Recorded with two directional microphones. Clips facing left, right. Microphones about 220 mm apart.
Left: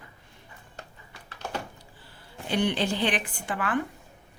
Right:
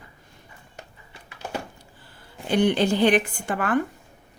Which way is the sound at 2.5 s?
50° right (ahead or behind).